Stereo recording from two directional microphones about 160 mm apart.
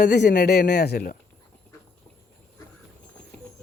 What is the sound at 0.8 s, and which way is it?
Speech, 75° left (ahead or behind).